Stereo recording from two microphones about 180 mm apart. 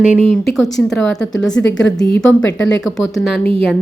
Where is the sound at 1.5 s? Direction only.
90° left.